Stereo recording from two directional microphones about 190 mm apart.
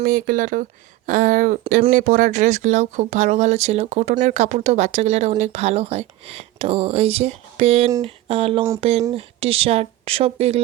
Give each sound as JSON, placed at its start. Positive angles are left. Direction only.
{"t": 0.0, "sound": "speech", "side_deg": -45}
{"t": 1.6, "sound": "speech", "side_deg": -30}
{"t": 1.9, "sound": "speech", "side_deg": -45}